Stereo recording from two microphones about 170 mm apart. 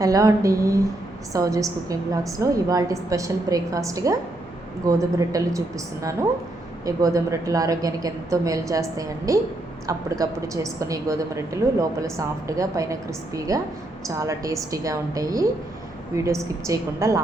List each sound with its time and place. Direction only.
0.0 s a woman's voice: 20° right (ahead or behind)